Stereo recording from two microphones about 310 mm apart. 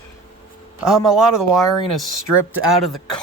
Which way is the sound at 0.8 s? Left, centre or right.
Centre.